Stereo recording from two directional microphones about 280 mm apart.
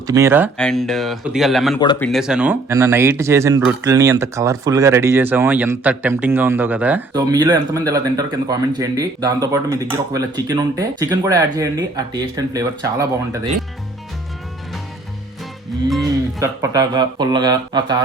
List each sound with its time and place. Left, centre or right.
0.1 s speech: centre
1.8 s speech: centre
2.0 s speech: centre
16.4 s speech: centre